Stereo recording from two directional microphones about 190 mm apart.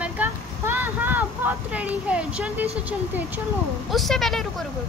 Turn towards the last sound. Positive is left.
turn(degrees=0)  # may be behind; listen again after turning